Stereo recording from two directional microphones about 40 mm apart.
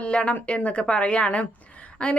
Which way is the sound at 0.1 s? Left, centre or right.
Left.